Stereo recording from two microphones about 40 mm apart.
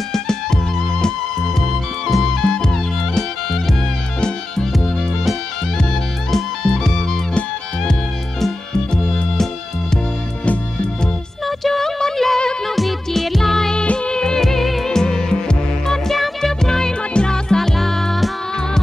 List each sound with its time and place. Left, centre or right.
0.1 s music: centre
6.3 s music: centre
11.4 s music: centre
13.7 s music: left
14.4 s music: centre
17.6 s music: centre